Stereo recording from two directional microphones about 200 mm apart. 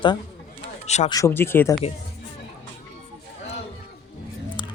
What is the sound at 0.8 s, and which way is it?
Speech, 35° left (ahead or behind).